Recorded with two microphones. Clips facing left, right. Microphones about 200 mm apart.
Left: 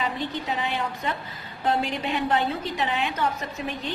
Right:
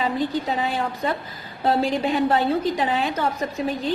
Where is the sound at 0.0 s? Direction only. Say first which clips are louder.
Right 6 dB; 35° right (ahead or behind).